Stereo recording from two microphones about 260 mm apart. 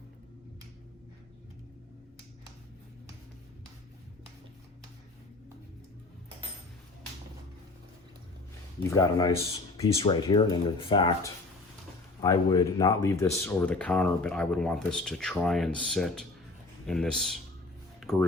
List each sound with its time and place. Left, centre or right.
8.9 s speech: centre